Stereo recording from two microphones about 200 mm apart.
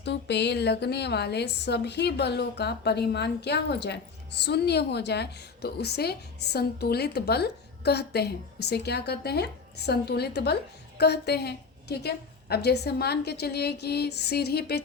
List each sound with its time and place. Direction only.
0.0 s a woman's voice: 60° left (ahead or behind)